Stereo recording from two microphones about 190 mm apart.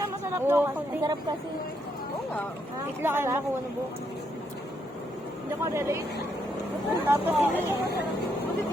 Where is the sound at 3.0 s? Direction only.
10° right (ahead or behind).